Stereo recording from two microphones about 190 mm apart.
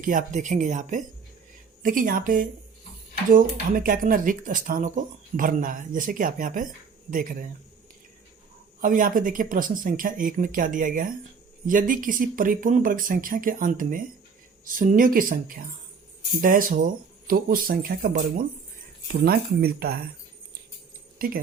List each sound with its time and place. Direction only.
0.0 s speech: 45° right (ahead or behind)
8.8 s speech: 45° right (ahead or behind)